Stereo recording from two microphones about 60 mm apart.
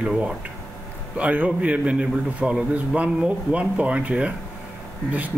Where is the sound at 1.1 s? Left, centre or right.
Right.